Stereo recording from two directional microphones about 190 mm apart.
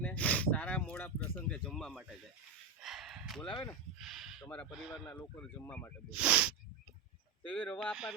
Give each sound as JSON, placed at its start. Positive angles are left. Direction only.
{"t": 0.0, "sound": "a sound", "side_deg": 5}
{"t": 3.9, "sound": "speech", "side_deg": 0}
{"t": 5.0, "sound": "speech", "side_deg": 10}
{"t": 6.1, "sound": "speech", "side_deg": -5}
{"t": 7.4, "sound": "speech", "side_deg": 10}